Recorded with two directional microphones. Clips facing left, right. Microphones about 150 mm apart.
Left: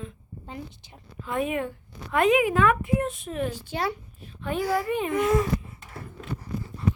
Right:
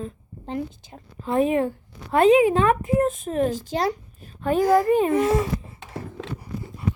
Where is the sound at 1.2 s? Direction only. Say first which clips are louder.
Right 7 dB; 35° right (ahead or behind).